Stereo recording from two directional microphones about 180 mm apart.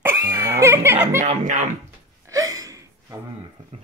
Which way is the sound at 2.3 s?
20° right (ahead or behind).